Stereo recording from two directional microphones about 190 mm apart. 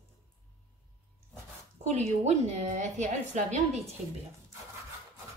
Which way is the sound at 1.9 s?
35° right (ahead or behind).